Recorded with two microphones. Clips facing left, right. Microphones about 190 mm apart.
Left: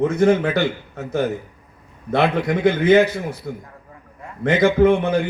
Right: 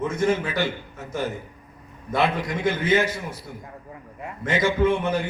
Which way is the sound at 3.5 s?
70° left (ahead or behind).